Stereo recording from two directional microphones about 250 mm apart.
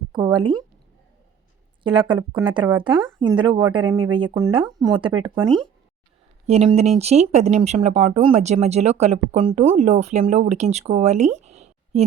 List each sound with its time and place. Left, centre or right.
0.1 s speech: centre
0.3 s speech: centre
1.8 s speech: centre
6.5 s speech: right